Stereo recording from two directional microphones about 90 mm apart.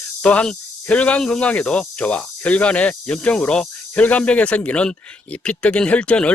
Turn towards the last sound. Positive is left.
turn(degrees=15)  # may be behind; listen again after turning